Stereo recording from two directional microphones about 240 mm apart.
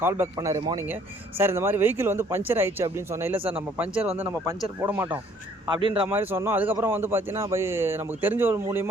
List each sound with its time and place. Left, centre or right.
0.0 s a man's voice: centre
4.0 s speech: right
4.6 s a man's voice: centre
5.6 s speech: centre
6.1 s a man's voice: centre